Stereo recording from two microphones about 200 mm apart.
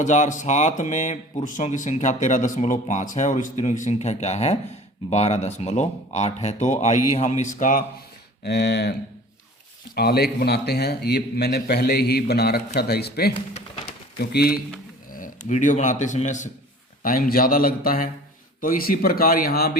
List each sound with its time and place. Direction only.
0.0 s a man's voice: 35° left (ahead or behind)
8.4 s a man's voice: 55° left (ahead or behind)
13.3 s a sound: 25° left (ahead or behind)
14.2 s a man's voice: 50° left (ahead or behind)
15.1 s a man's voice: 40° left (ahead or behind)